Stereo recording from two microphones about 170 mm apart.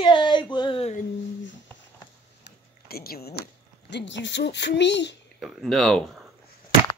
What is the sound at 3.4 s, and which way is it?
Speech, 90° left.